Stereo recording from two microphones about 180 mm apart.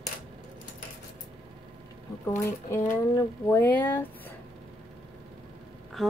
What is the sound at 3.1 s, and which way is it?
Speech, 15° left (ahead or behind).